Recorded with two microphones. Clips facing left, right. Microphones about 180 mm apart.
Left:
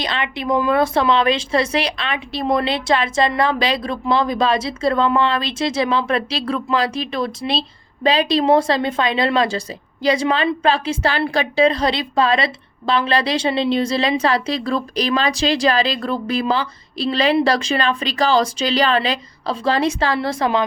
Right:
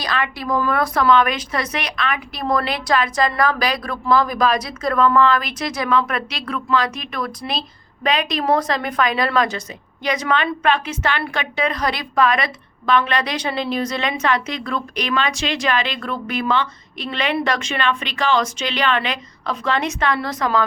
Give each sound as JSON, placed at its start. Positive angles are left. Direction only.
{"t": 0.0, "sound": "a woman's voice", "side_deg": 25}